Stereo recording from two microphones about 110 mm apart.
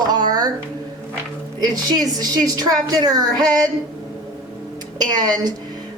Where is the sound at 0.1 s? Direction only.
35° right (ahead or behind).